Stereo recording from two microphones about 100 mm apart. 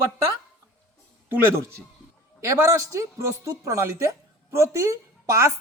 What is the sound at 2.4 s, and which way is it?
A woman's voice, 30° right (ahead or behind).